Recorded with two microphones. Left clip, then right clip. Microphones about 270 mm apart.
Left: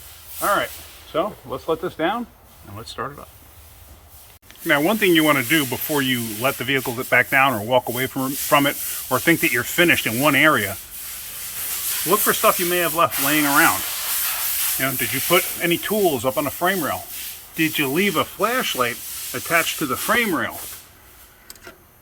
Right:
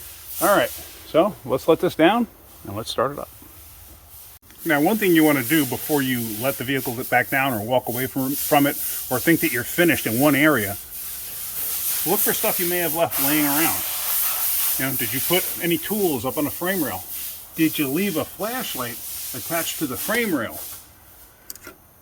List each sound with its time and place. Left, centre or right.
0.3 s a sound: right
1.1 s speech: right
2.7 s speech: right
4.6 s speech: centre
12.2 s speech: centre
14.8 s speech: centre
18.2 s speech: left
20.1 s speech: centre